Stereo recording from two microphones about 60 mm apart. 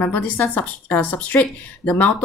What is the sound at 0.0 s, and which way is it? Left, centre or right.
Speech, left.